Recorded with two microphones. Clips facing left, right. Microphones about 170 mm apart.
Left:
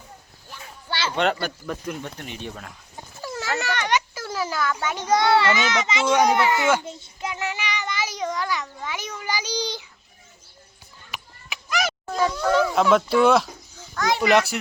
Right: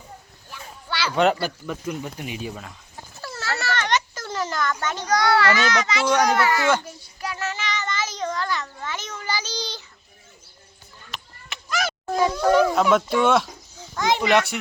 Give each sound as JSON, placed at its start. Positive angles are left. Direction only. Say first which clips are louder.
{"t": 0.9, "sound": "a sound", "louder": "even", "side_deg": 25}
{"t": 1.1, "sound": "speech", "louder": "right 4 dB", "side_deg": -5}
{"t": 3.2, "sound": "baby cry", "louder": "left 2 dB", "side_deg": 15}
{"t": 5.0, "sound": "a child's voice", "louder": "left 1 dB", "side_deg": 25}
{"t": 6.8, "sound": "child singing", "louder": "left 1 dB", "side_deg": 20}
{"t": 11.1, "sound": "a sound", "louder": "even", "side_deg": 10}
{"t": 12.8, "sound": "speech", "louder": "left 2 dB", "side_deg": 0}
{"t": 13.9, "sound": "a sound", "louder": "right 1 dB", "side_deg": -20}
{"t": 14.2, "sound": "speech", "louder": "left 3 dB", "side_deg": 0}